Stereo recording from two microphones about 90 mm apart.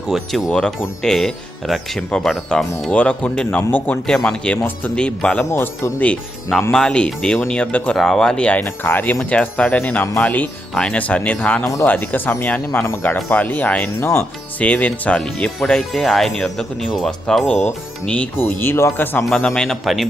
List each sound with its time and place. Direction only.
0.1 s speech: centre (ahead or behind)
2.9 s speech: 10° left (ahead or behind)
4.0 s speech: 5° left (ahead or behind)
5.5 s speech: 30° left (ahead or behind)
6.7 s speech: 10° left (ahead or behind)
9.1 s speech: 10° left (ahead or behind)
11.6 s speech: 35° left (ahead or behind)
11.9 s speech: 20° left (ahead or behind)
14.0 s speech: 30° left (ahead or behind)
14.6 s speech: 15° left (ahead or behind)
18.6 s speech: 30° left (ahead or behind)
19.2 s speech: 5° left (ahead or behind)